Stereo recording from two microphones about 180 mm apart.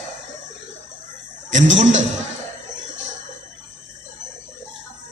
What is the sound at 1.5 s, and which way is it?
Speech, 40° right (ahead or behind).